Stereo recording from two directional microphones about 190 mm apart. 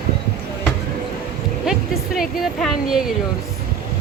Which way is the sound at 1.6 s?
Centre (ahead or behind).